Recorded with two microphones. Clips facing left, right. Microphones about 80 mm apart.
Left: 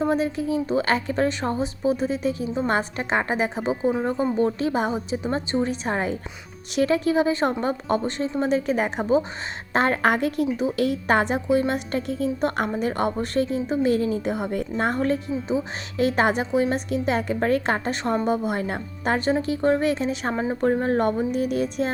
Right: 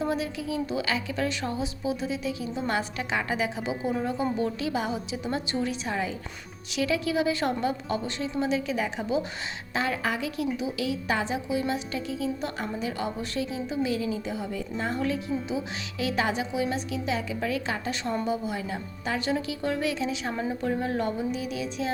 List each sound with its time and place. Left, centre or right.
0.0 s a woman's voice: left